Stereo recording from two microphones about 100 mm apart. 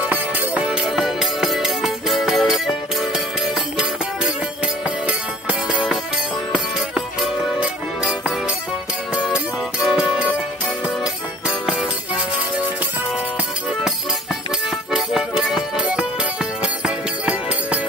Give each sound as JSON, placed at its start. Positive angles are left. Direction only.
{"t": 0.1, "sound": "music", "side_deg": -10}
{"t": 4.8, "sound": "music", "side_deg": -10}
{"t": 7.2, "sound": "music", "side_deg": -10}
{"t": 14.9, "sound": "music", "side_deg": -5}